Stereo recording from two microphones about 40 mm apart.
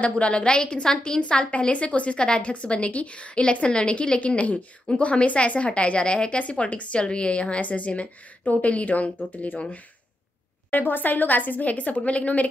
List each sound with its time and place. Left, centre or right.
0.0 s a woman's voice: left
2.5 s a woman's voice: left
10.7 s a woman's voice: left